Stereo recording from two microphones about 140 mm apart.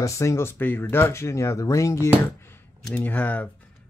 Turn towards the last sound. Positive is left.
turn(degrees=10)  # may be behind; listen again after turning